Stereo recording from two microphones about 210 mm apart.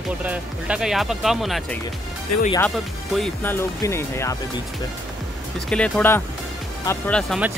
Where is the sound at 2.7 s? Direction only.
Centre (ahead or behind).